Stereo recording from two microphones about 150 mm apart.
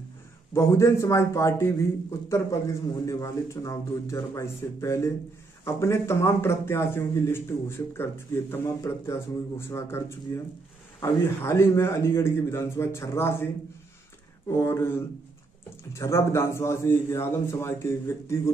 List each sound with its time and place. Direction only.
0.5 s a man's voice: 15° left (ahead or behind)
14.5 s a man's voice: 15° left (ahead or behind)